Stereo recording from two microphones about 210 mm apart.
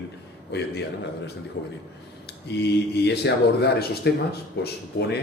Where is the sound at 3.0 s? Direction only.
55° left (ahead or behind).